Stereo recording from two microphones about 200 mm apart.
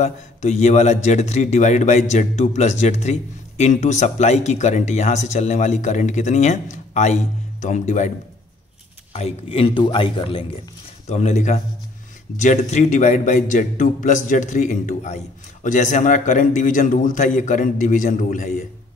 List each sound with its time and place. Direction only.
0.0 s a man's voice: 35° left (ahead or behind)
9.1 s a man's voice: 30° left (ahead or behind)